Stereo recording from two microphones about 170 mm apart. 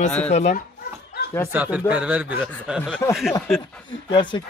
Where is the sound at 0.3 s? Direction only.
40° left (ahead or behind).